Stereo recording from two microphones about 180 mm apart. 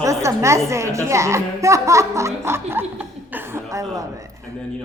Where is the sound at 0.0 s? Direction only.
15° right (ahead or behind).